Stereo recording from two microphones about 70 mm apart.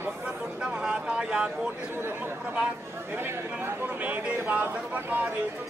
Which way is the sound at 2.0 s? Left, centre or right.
Right.